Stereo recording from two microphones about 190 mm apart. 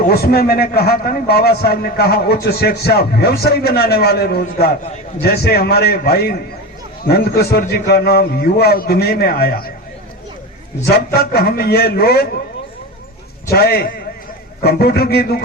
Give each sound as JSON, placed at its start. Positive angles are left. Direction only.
{"t": 0.0, "sound": "a man's voice", "side_deg": 55}
{"t": 10.8, "sound": "a man's voice", "side_deg": 55}
{"t": 13.5, "sound": "a man's voice", "side_deg": 55}